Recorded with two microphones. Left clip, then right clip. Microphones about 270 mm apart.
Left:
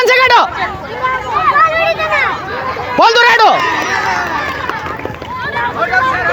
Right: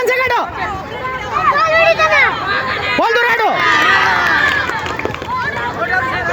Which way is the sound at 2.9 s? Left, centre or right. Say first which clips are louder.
Left 6 dB; left.